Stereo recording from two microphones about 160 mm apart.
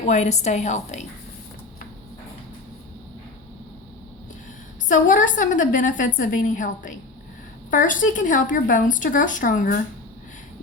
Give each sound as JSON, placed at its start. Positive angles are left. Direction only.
{"t": 0.0, "sound": "a woman's voice", "side_deg": 45}
{"t": 4.9, "sound": "a woman's voice", "side_deg": 55}